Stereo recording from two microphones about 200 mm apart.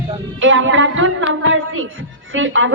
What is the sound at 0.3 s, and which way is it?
Music, 75° right (ahead or behind).